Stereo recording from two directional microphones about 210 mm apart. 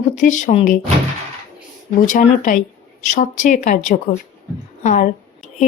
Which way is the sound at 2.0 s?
35° left (ahead or behind).